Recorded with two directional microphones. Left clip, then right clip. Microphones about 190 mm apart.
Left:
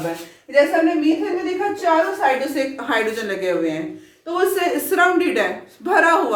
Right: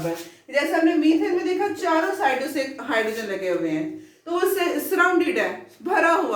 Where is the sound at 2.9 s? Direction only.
35° left (ahead or behind).